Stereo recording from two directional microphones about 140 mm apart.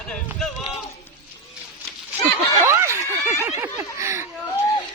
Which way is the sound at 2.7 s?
20° right (ahead or behind).